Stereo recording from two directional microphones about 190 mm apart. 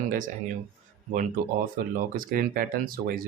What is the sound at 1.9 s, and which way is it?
Speech, 50° right (ahead or behind).